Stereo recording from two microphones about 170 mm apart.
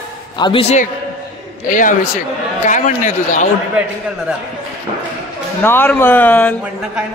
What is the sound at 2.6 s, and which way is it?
Speech, 45° left (ahead or behind).